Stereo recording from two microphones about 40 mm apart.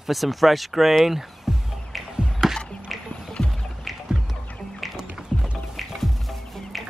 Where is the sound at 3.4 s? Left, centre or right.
Centre.